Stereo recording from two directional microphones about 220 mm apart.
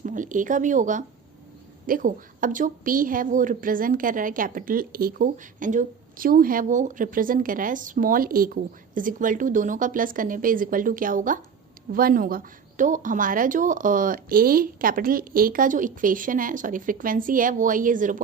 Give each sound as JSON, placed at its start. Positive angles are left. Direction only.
{"t": 0.0, "sound": "a woman's voice", "side_deg": -35}